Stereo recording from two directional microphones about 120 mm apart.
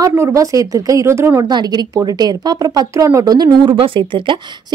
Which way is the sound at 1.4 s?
35° right (ahead or behind).